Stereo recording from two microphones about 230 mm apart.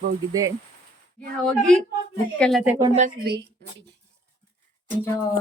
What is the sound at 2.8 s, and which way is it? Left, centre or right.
Speech, right.